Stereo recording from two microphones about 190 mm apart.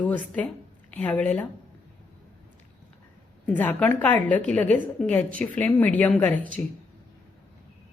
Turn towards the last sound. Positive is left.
turn(degrees=5)  # may be behind; listen again after turning